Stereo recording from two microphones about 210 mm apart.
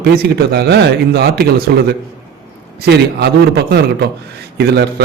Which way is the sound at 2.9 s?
55° right (ahead or behind).